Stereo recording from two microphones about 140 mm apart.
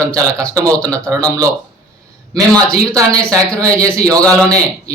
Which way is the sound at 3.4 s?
10° left (ahead or behind).